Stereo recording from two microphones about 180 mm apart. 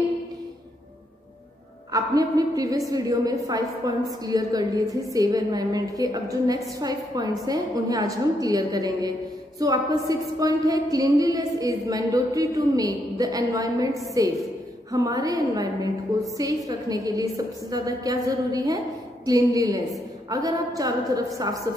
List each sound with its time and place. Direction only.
1.9 s a woman's voice: 20° right (ahead or behind)